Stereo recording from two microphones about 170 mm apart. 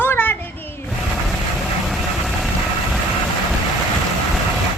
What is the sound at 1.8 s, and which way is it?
Vehicle, centre (ahead or behind).